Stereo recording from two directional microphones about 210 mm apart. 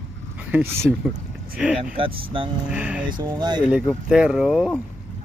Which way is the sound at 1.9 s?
25° right (ahead or behind).